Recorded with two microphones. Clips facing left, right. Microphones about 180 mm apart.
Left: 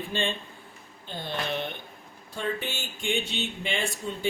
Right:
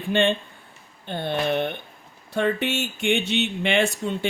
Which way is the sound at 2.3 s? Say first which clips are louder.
Right 9 dB; 70° right (ahead or behind).